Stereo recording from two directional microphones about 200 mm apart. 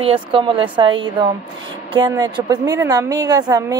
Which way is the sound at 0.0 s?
25° right (ahead or behind).